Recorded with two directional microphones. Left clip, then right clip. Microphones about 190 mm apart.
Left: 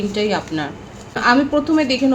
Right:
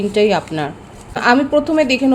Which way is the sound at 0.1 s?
60° right (ahead or behind).